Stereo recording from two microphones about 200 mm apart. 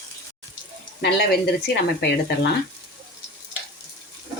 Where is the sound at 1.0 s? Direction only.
55° left (ahead or behind).